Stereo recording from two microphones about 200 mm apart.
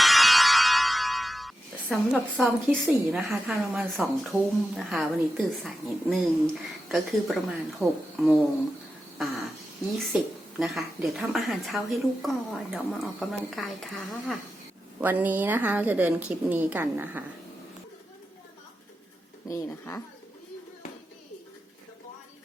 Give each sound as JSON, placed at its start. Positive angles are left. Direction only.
{"t": 0.0, "sound": "music", "side_deg": 0}
{"t": 6.8, "sound": "a woman's voice", "side_deg": 0}
{"t": 10.6, "sound": "a woman's voice", "side_deg": 0}
{"t": 19.5, "sound": "speech", "side_deg": 15}